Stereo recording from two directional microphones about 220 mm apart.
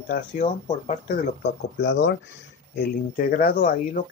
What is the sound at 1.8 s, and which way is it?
Speech, 55° left (ahead or behind).